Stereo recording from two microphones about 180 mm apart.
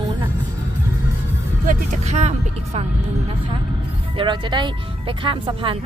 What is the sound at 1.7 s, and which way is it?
Speech, 40° right (ahead or behind).